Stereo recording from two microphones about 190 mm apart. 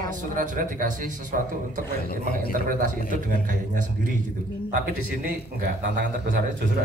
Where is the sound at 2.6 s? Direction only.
45° right (ahead or behind).